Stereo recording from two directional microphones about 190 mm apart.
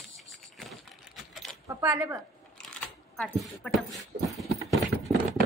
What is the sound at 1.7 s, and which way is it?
Speech, 15° right (ahead or behind).